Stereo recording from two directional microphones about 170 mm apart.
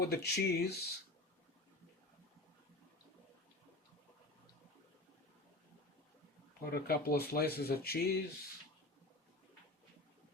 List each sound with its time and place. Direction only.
0.0 s speech: 70° left (ahead or behind)
6.7 s speech: 65° left (ahead or behind)